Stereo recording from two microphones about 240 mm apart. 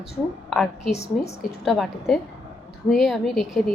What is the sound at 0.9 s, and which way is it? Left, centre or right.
Speech, left.